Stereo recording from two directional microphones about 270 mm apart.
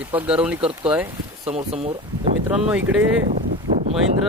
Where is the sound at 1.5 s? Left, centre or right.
Right.